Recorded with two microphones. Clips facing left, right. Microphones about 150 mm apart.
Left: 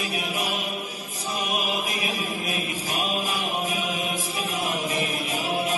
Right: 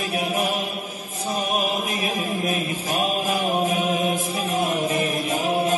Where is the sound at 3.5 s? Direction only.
35° right (ahead or behind).